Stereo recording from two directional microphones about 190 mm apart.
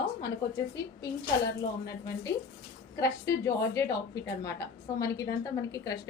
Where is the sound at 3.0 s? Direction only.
15° left (ahead or behind).